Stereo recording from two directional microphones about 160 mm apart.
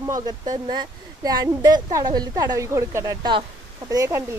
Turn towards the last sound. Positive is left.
turn(degrees=-15)  # may be behind; listen again after turning